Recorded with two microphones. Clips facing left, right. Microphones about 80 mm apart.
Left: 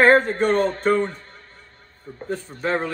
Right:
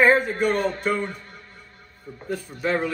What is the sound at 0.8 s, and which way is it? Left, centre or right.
Music, left.